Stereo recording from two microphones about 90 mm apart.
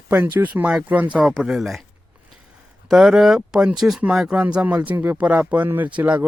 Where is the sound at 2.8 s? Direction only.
5° right (ahead or behind).